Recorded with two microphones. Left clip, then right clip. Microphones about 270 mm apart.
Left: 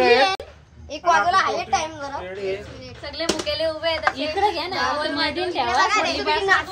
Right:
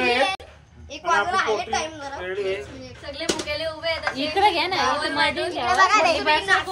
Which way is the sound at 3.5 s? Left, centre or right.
Left.